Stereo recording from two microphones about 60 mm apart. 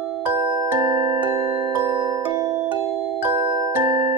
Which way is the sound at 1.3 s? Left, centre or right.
Right.